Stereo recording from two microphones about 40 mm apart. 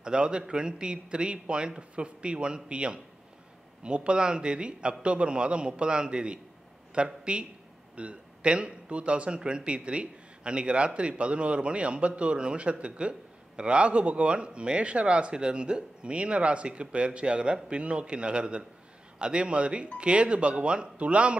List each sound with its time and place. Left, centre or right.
0.0 s speech: right